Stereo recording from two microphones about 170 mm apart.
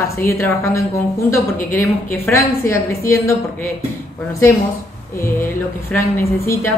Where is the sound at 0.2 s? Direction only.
15° left (ahead or behind).